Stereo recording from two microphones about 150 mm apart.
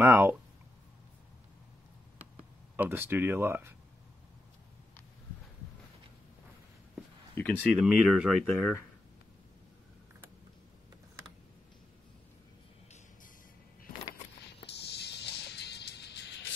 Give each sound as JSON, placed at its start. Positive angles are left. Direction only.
{"t": 0.0, "sound": "speech", "side_deg": -15}
{"t": 2.3, "sound": "speech", "side_deg": -10}
{"t": 7.4, "sound": "speech", "side_deg": 15}
{"t": 7.7, "sound": "speech", "side_deg": -5}
{"t": 14.8, "sound": "music", "side_deg": 90}